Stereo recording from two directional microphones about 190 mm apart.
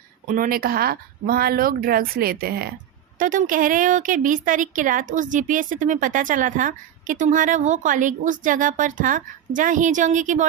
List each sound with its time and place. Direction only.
0.3 s a woman's voice: 45° right (ahead or behind)